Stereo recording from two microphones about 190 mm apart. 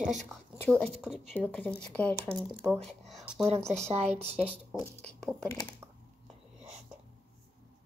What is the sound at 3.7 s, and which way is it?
Speech, 35° right (ahead or behind).